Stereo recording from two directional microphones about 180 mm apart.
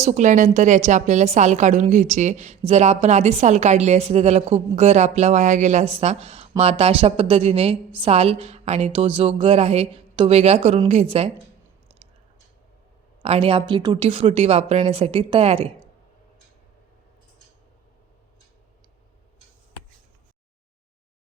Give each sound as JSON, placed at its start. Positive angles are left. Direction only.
{"t": 0.0, "sound": "a woman's voice", "side_deg": -40}
{"t": 13.2, "sound": "a woman's voice", "side_deg": -35}